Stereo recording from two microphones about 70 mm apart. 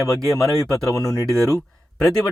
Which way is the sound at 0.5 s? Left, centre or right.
Left.